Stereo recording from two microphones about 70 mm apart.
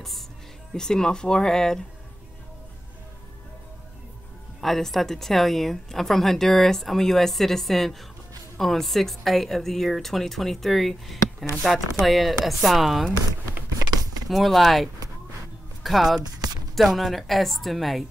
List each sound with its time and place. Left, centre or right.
0.7 s speech: centre
4.6 s speech: centre
14.3 s speech: centre
16.2 s speech: right
16.7 s speech: centre